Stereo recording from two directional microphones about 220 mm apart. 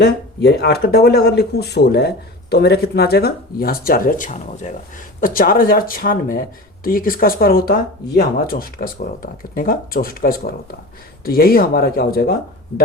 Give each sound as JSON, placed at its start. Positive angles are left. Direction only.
{"t": 0.0, "sound": "speech", "side_deg": 50}